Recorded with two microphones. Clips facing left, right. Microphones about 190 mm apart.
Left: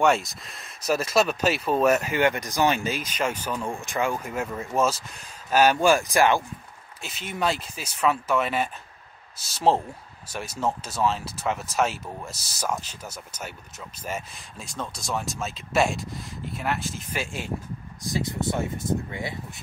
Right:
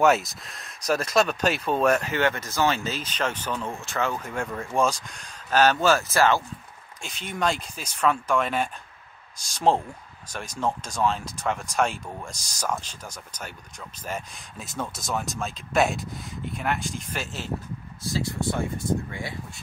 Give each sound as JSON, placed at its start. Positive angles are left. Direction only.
{"t": 0.0, "sound": "speech", "side_deg": 0}
{"t": 7.0, "sound": "speech", "side_deg": 5}